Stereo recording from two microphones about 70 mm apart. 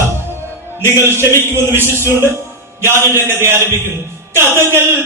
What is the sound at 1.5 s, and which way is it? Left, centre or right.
Music, right.